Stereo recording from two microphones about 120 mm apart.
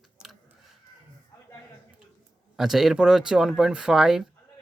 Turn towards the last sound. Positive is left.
turn(degrees=-5)  # may be behind; listen again after turning